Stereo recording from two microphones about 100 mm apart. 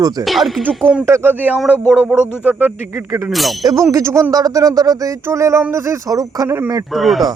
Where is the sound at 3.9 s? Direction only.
30° right (ahead or behind).